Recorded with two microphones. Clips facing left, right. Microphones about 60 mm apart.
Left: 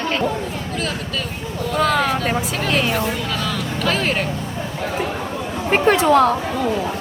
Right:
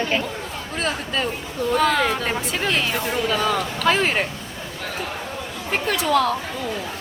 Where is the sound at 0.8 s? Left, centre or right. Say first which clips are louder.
Right 3 dB; centre.